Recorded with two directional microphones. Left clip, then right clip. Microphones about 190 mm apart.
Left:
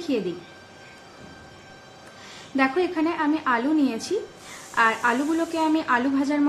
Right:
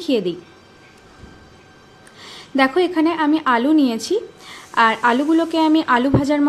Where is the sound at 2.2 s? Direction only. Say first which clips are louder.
Right 6 dB; 40° right (ahead or behind).